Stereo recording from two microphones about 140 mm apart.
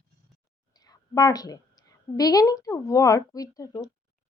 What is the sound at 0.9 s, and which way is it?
A woman's voice, 25° left (ahead or behind).